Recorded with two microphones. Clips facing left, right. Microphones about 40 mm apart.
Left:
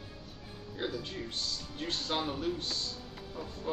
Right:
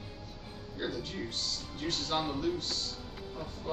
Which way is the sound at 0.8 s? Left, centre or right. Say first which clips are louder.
Even; left.